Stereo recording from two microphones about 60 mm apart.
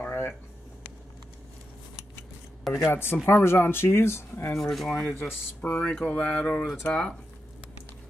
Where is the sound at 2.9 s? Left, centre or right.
Left.